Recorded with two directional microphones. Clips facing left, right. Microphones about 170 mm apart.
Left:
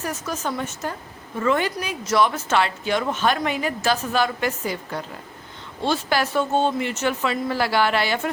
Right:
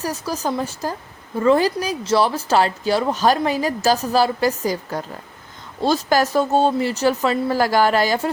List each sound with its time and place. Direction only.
0.0 s speech: 35° right (ahead or behind)